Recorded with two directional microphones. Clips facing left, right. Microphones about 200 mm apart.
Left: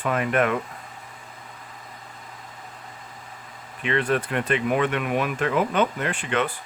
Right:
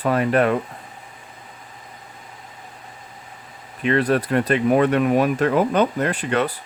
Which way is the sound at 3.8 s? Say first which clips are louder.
Right 5 dB; 40° right (ahead or behind).